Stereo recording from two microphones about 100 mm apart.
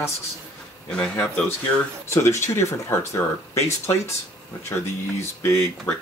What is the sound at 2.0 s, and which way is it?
Speech, 25° left (ahead or behind).